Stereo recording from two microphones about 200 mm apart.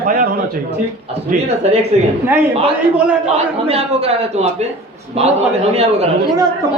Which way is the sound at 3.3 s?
30° right (ahead or behind).